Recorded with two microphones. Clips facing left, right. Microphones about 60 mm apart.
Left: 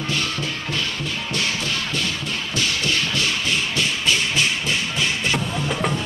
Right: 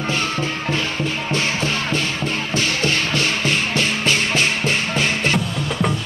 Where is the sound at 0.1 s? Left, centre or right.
Right.